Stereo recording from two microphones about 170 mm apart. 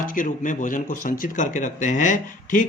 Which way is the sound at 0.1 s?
50° left (ahead or behind).